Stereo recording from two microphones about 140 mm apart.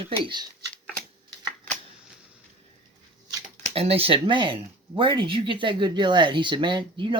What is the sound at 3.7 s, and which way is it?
Speech, 45° right (ahead or behind).